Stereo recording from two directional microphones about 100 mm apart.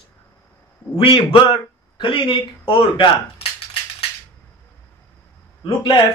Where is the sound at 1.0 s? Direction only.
60° left (ahead or behind).